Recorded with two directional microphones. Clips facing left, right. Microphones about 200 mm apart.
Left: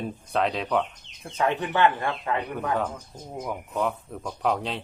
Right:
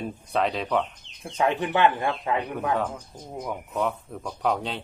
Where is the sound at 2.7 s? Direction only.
Centre (ahead or behind).